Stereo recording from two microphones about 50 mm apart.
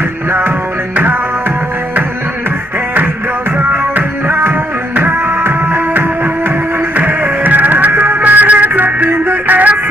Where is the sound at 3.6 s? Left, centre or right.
Right.